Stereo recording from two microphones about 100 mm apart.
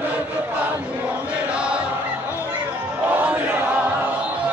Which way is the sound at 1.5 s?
10° right (ahead or behind).